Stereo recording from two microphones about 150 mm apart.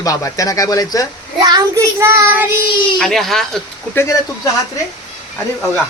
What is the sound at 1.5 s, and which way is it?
Child singing, 25° right (ahead or behind).